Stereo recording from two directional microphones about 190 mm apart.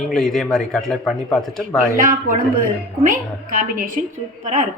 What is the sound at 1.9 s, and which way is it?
A woman's voice, 45° right (ahead or behind).